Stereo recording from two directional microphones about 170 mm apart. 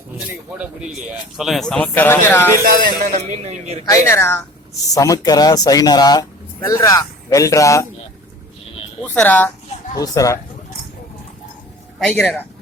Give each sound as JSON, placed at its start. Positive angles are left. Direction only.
{"t": 0.3, "sound": "speech", "side_deg": -5}
{"t": 2.6, "sound": "music", "side_deg": -50}
{"t": 3.4, "sound": "speech", "side_deg": -40}
{"t": 3.8, "sound": "speech", "side_deg": 15}
{"t": 9.0, "sound": "speech", "side_deg": 10}
{"t": 9.9, "sound": "speech", "side_deg": 20}
{"t": 11.9, "sound": "a man's voice", "side_deg": 0}